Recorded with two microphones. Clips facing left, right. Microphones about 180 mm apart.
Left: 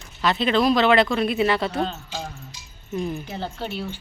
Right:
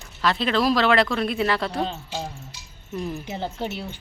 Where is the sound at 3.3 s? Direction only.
15° right (ahead or behind).